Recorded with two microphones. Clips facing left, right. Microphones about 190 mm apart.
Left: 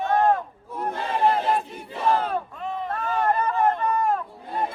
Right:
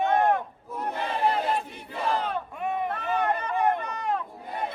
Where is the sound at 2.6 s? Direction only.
15° right (ahead or behind).